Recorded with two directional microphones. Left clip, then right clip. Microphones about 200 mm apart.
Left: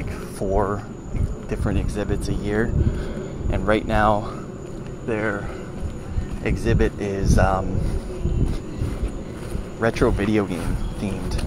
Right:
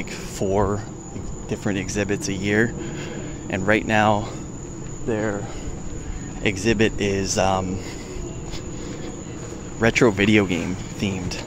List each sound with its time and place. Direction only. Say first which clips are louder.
0.4 s speech: right 1 dB; 35° right (ahead or behind)
3.4 s speech: right 1 dB; 20° right (ahead or behind)
6.4 s speech: right 3 dB; 30° right (ahead or behind)
9.8 s speech: right 3 dB; 35° right (ahead or behind)